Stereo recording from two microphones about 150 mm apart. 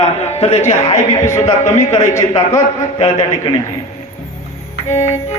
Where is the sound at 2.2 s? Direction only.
20° left (ahead or behind).